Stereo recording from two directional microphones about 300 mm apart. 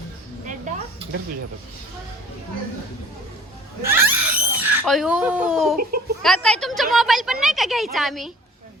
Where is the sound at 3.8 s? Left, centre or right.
Centre.